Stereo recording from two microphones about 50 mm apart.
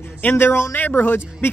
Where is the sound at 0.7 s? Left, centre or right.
Left.